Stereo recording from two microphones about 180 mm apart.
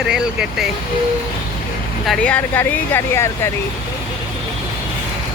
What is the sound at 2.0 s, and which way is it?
Speech, 5° left (ahead or behind).